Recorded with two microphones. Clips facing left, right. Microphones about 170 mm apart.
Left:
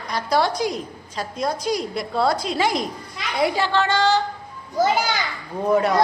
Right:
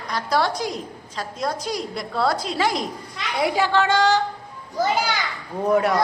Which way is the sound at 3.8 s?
15° right (ahead or behind).